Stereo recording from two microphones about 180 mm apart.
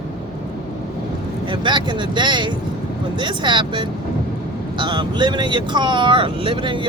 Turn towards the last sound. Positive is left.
turn(degrees=-25)  # may be behind; listen again after turning